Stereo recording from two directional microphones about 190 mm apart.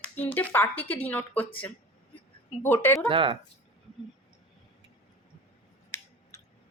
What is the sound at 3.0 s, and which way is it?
Speech, 25° right (ahead or behind).